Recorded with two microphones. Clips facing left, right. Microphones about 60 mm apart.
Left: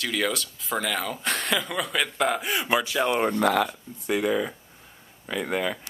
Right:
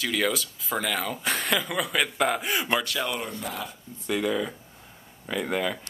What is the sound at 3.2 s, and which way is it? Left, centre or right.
Speech, left.